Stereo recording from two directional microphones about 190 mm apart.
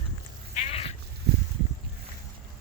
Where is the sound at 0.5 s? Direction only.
35° left (ahead or behind).